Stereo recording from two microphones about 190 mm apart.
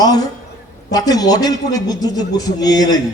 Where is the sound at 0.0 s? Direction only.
20° left (ahead or behind).